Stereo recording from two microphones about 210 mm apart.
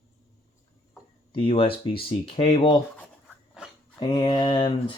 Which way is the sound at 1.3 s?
25° left (ahead or behind).